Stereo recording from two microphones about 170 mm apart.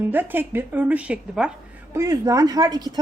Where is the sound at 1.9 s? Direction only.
20° right (ahead or behind).